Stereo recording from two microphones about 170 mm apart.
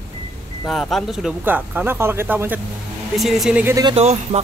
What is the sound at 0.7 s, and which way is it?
Speech, centre (ahead or behind).